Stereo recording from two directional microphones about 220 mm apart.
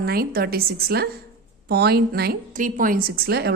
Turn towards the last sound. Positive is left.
turn(degrees=-45)  # may be behind; listen again after turning